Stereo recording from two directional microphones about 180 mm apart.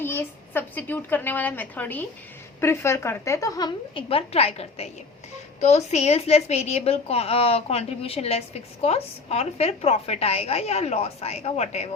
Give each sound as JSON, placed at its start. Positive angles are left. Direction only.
{"t": 0.0, "sound": "a woman's voice", "side_deg": 10}